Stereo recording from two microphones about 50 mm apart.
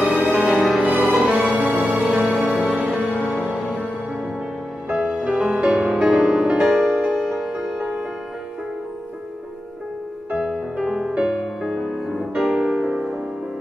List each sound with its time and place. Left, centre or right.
0.2 s music: centre
1.6 s music: centre
2.1 s music: centre
5.2 s music: centre
10.3 s music: centre